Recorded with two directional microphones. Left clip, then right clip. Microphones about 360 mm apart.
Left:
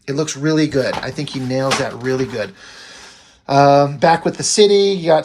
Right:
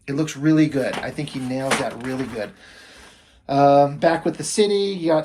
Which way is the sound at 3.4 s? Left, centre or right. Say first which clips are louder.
Left 4 dB; centre.